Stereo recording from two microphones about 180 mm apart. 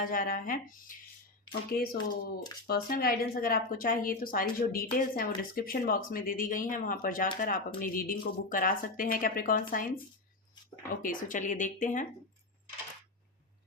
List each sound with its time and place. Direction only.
0.0 s speech: 50° left (ahead or behind)
11.0 s speech: 50° left (ahead or behind)